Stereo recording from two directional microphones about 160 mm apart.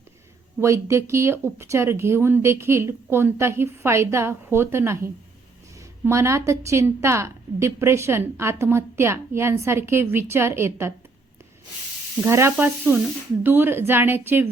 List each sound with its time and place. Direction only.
0.6 s a woman's voice: 15° right (ahead or behind)
12.2 s a woman's voice: 15° right (ahead or behind)